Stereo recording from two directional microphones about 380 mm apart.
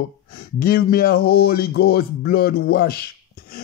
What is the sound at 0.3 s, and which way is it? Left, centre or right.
Speech, left.